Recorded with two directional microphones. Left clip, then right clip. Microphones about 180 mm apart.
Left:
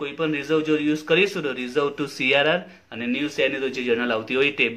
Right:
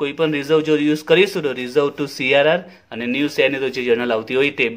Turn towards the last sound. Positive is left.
turn(degrees=-45)  # may be behind; listen again after turning